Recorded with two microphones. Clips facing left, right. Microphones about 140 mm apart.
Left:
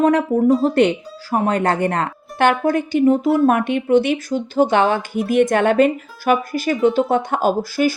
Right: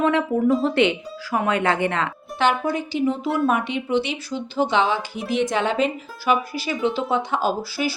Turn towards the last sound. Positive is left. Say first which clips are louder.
# left 6 dB
turn(degrees=50)  # may be behind; listen again after turning